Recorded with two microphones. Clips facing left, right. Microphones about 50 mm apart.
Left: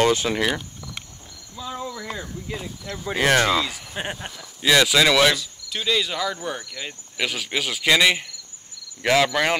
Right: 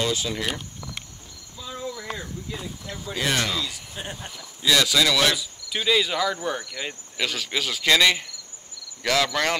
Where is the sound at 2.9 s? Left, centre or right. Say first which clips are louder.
Left 7 dB; left.